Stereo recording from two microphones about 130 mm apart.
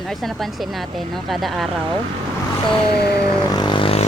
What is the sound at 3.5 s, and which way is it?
Vehicle, 35° left (ahead or behind).